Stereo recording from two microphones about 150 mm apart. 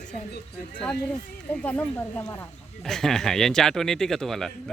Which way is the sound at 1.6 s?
10° left (ahead or behind).